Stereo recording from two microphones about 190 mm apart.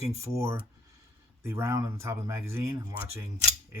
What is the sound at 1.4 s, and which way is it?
Speech, 15° right (ahead or behind).